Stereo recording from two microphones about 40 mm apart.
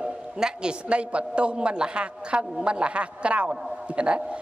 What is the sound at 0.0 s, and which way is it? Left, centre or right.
A man's voice, right.